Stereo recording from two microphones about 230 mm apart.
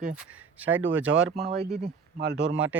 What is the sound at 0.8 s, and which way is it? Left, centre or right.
Speech, right.